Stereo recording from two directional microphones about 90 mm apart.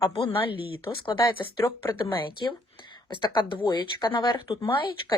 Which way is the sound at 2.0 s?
60° left (ahead or behind).